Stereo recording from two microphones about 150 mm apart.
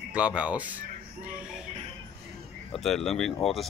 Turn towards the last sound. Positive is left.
turn(degrees=0)  # may be behind; listen again after turning